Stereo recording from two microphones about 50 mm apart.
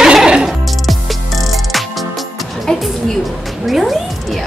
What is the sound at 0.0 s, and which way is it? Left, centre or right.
Music, centre.